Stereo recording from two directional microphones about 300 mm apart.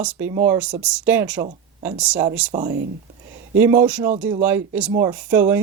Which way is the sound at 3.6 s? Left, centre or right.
Centre.